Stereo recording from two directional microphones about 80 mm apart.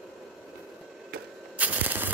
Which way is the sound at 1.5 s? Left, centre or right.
Centre.